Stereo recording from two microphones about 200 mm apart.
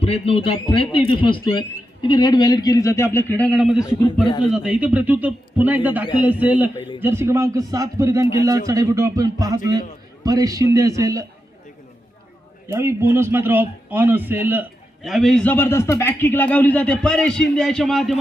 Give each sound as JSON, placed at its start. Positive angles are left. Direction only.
{"t": 0.0, "sound": "a man's voice", "side_deg": 30}
{"t": 12.6, "sound": "a man's voice", "side_deg": -15}